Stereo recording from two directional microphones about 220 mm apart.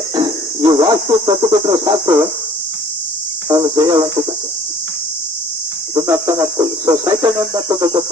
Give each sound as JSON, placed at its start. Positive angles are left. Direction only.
{"t": 0.2, "sound": "a sound", "side_deg": -15}
{"t": 1.8, "sound": "speech", "side_deg": -15}
{"t": 3.5, "sound": "speech", "side_deg": -15}
{"t": 5.9, "sound": "speech", "side_deg": -15}